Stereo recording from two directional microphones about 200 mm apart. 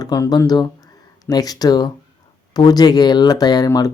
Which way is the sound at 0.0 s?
20° left (ahead or behind).